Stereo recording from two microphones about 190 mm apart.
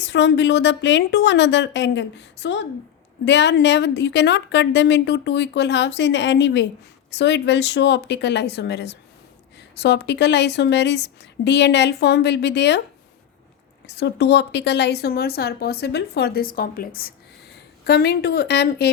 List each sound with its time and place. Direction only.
0.0 s a woman's voice: 70° left (ahead or behind)
13.8 s a woman's voice: 60° left (ahead or behind)